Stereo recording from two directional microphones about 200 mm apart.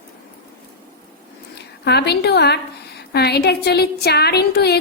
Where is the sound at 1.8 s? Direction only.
55° left (ahead or behind).